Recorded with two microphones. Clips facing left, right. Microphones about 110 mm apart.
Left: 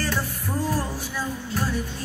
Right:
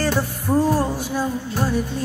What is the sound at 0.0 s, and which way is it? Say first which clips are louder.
Music: right 6 dB; 45° right (ahead or behind).